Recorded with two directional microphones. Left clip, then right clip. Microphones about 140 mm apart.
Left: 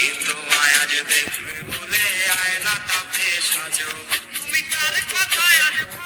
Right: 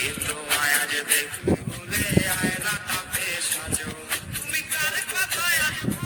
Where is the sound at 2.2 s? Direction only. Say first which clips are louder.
Left 6 dB; 55° right (ahead or behind).